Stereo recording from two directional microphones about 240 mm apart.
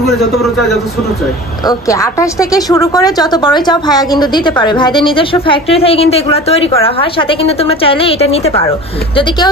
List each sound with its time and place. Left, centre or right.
1.7 s a woman's voice: centre